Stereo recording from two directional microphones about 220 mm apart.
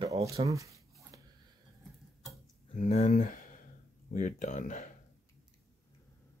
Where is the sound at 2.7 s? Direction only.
30° left (ahead or behind).